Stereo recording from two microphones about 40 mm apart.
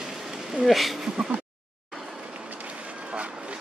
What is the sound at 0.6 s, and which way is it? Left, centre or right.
Speech, centre.